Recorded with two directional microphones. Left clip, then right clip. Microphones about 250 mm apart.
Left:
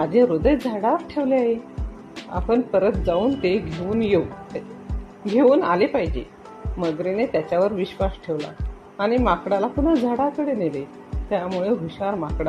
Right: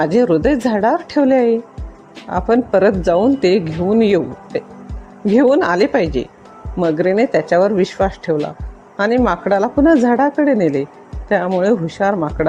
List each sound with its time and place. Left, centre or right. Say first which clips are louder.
0.0 s a woman's voice: right 4 dB; right